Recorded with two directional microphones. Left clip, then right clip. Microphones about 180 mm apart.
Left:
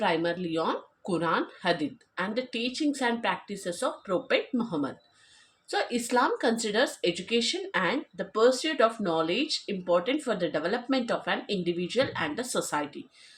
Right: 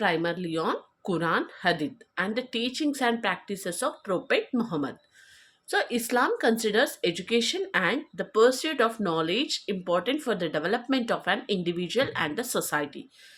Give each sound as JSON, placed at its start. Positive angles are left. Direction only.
{"t": 0.0, "sound": "speech", "side_deg": -45}